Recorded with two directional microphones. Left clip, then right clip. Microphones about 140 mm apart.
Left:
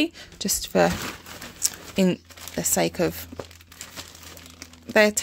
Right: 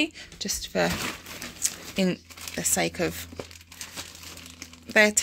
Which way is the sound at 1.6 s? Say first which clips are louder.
Left 4 dB; 50° left (ahead or behind).